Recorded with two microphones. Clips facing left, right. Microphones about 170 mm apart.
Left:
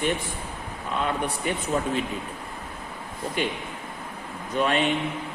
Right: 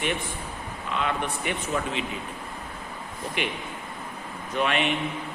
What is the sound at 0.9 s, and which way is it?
Speech, 40° left (ahead or behind).